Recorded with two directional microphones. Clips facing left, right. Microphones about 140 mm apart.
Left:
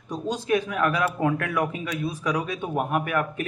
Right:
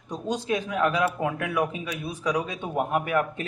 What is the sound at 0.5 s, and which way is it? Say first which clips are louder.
Speech: left 2 dB; 20° right (ahead or behind).